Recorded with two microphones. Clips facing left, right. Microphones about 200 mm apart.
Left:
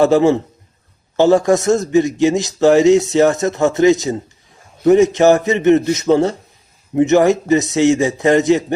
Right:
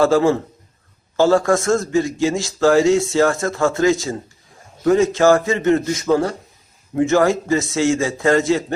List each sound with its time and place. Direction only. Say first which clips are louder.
0.0 s a man's voice: left 3 dB; 20° left (ahead or behind)